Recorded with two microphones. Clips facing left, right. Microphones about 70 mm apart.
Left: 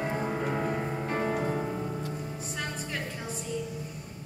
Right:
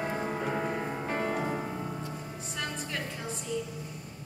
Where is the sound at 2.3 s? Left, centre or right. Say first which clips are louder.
Left 1 dB; centre.